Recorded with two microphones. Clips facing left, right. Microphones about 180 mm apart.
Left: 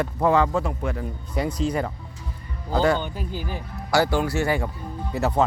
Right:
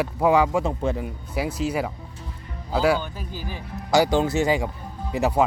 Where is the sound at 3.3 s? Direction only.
55° left (ahead or behind).